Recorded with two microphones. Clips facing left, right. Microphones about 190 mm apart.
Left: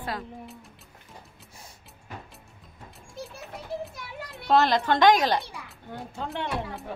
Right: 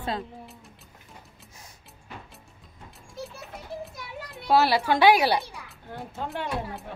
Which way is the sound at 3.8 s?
5° right (ahead or behind).